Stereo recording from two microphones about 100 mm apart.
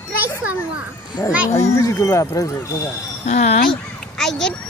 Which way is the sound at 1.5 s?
30° left (ahead or behind).